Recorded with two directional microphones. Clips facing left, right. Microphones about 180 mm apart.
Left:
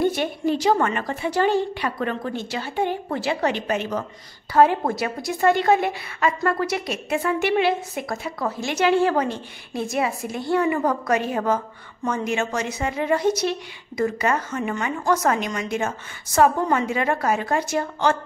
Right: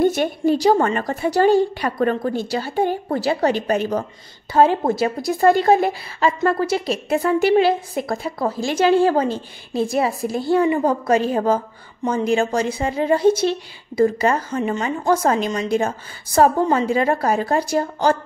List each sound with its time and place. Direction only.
0.0 s a woman's voice: 45° right (ahead or behind)
4.6 s a woman's voice: 25° right (ahead or behind)